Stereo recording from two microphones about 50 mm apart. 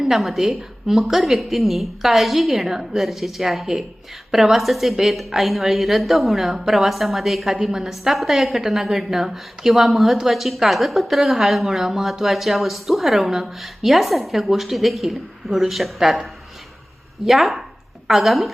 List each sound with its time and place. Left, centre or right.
0.0 s a woman's voice: centre